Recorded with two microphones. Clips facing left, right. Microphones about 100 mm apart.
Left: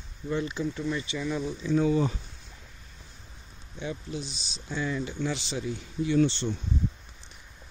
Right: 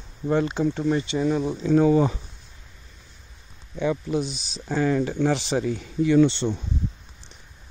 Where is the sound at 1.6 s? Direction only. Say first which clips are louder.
Right 6 dB; 70° right (ahead or behind).